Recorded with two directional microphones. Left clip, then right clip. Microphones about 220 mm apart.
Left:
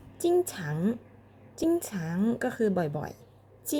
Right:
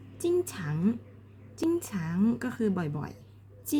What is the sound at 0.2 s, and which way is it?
A woman's voice, 15° left (ahead or behind).